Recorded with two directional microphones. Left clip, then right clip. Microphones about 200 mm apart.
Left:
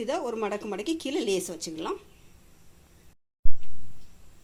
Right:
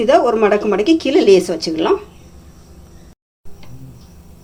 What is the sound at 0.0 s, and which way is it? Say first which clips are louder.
A woman's voice: right 18 dB; 60° left (ahead or behind).